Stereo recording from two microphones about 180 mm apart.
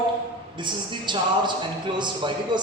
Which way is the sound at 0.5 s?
25° right (ahead or behind).